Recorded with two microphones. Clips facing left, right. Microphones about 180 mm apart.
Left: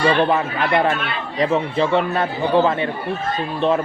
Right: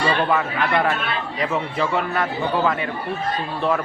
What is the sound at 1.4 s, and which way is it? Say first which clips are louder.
Speech: left 6 dB; 25° left (ahead or behind).